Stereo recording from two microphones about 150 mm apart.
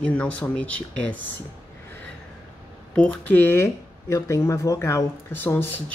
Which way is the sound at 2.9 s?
10° left (ahead or behind).